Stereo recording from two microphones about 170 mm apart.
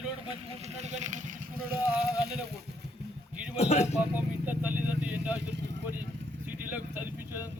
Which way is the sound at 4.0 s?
10° right (ahead or behind).